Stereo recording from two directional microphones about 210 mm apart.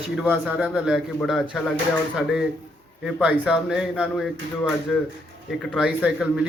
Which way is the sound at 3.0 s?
5° right (ahead or behind).